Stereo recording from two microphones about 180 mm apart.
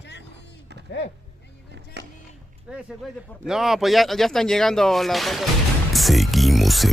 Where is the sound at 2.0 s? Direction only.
70° right (ahead or behind).